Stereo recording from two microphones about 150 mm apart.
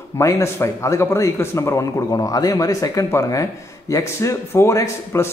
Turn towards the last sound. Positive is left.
turn(degrees=20)  # may be behind; listen again after turning